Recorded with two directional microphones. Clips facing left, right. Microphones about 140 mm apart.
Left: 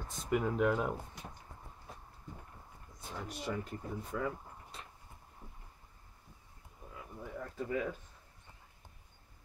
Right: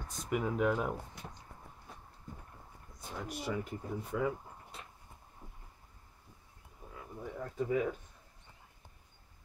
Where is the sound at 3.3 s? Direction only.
5° right (ahead or behind).